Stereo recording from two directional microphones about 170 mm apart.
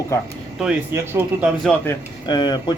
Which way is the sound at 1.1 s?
15° right (ahead or behind).